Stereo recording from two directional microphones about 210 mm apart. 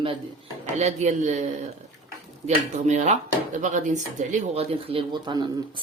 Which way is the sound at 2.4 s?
35° right (ahead or behind).